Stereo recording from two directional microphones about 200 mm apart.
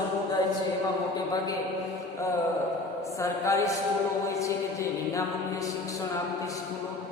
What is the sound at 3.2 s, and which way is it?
Chant, 15° left (ahead or behind).